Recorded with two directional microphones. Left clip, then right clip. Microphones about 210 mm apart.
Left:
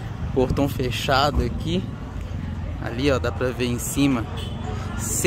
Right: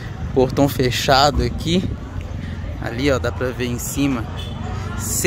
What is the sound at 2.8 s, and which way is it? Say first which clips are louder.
Speech: right 3 dB; centre (ahead or behind).